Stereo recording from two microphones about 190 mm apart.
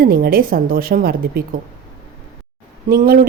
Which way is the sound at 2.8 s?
50° right (ahead or behind).